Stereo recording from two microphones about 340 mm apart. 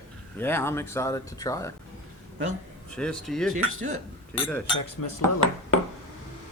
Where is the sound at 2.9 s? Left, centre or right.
Centre.